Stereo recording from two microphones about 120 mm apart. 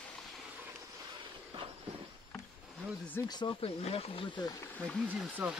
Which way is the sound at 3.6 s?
55° left (ahead or behind).